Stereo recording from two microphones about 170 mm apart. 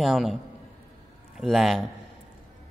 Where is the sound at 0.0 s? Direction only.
Centre (ahead or behind).